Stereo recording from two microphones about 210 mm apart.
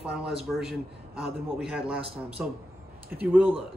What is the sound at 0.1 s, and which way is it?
A man's voice, 5° right (ahead or behind).